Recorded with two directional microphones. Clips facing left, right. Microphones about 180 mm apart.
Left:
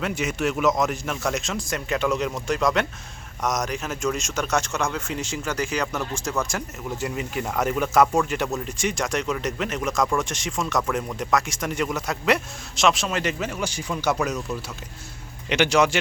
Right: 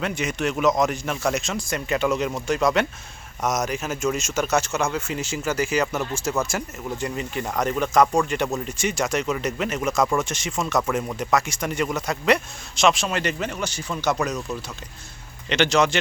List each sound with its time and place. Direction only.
0.0 s a man's voice: 5° left (ahead or behind)